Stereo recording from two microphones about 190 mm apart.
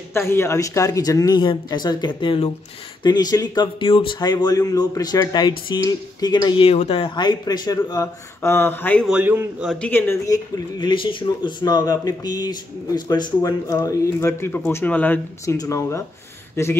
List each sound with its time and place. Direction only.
0.1 s speech: 15° left (ahead or behind)
9.1 s a man's voice: 5° right (ahead or behind)
9.7 s speech: 10° left (ahead or behind)